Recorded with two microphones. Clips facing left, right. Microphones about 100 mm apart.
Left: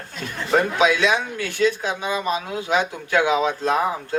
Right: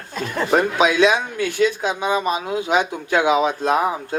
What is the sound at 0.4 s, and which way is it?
Speech, 20° right (ahead or behind).